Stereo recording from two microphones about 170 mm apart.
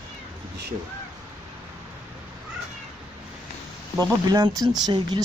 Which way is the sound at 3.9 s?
25° right (ahead or behind).